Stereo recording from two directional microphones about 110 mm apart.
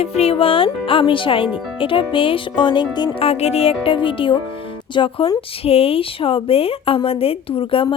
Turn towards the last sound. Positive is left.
turn(degrees=55)  # may be behind; listen again after turning